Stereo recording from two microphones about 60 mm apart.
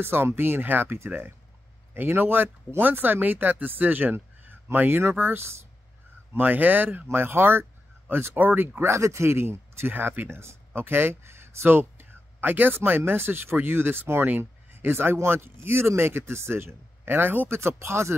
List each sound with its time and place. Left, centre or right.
0.0 s speech: right
0.9 s speech: right
6.3 s speech: right
8.9 s speech: right
17.6 s speech: right